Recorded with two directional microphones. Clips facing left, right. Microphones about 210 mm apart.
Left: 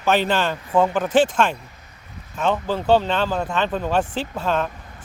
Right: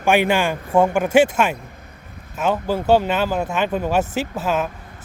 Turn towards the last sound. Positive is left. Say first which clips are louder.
# right 1 dB
turn(degrees=-5)  # may be behind; listen again after turning